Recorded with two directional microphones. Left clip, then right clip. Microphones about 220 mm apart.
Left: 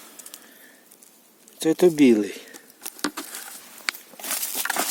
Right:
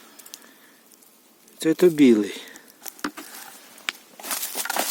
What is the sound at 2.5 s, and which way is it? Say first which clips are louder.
Patter: left 1 dB; 40° left (ahead or behind).